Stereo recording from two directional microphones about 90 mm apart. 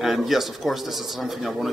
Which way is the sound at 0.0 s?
Centre (ahead or behind).